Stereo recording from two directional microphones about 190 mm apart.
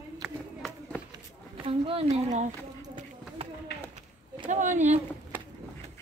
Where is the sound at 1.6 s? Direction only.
30° right (ahead or behind).